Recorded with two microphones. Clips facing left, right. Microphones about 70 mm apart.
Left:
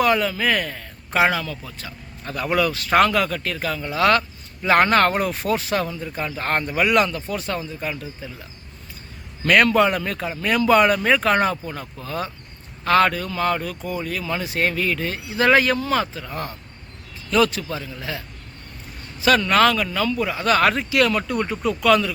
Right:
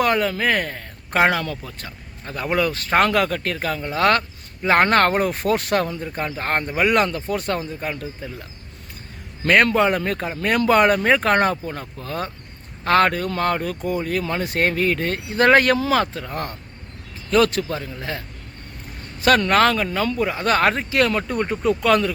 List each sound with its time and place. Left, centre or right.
0.0 s speech: right
2.2 s speech: right
5.5 s speech: right
6.3 s speech: right
6.9 s speech: right
7.9 s speech: right
9.5 s speech: right
15.7 s speech: right
19.2 s speech: right
21.6 s speech: right